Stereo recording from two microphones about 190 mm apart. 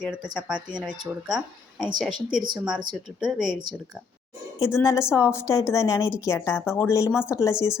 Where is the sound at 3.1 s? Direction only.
5° right (ahead or behind).